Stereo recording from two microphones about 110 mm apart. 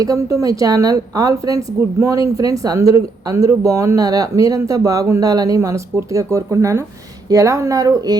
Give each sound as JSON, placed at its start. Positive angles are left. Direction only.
{"t": 0.0, "sound": "speech", "side_deg": -30}